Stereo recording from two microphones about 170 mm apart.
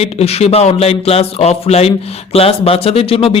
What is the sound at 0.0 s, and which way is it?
A man's voice, 35° left (ahead or behind).